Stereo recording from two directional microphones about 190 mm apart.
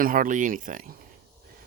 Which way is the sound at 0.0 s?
45° right (ahead or behind).